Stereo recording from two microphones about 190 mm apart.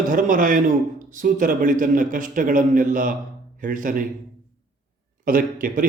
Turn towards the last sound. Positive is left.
turn(degrees=-45)  # may be behind; listen again after turning